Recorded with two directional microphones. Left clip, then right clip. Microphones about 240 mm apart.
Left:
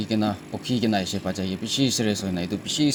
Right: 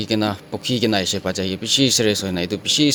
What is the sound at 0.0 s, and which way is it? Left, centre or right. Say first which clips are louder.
Speech: right 5 dB; right.